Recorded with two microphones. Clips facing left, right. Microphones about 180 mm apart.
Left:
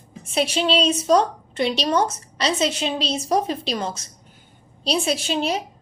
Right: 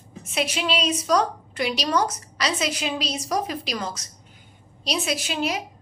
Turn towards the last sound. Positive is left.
turn(degrees=30)  # may be behind; listen again after turning